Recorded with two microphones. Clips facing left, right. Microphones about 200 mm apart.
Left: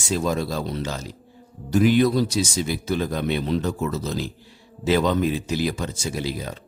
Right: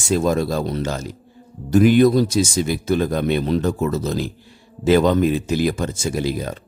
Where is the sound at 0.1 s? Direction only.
50° right (ahead or behind).